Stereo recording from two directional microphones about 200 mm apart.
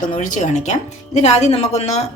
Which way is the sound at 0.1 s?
40° left (ahead or behind).